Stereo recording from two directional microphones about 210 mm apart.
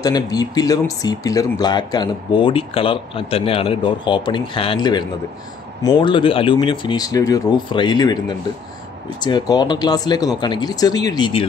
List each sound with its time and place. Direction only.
0.0 s speech: 20° left (ahead or behind)